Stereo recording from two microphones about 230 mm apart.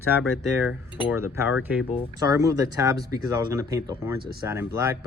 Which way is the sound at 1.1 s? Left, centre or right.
Centre.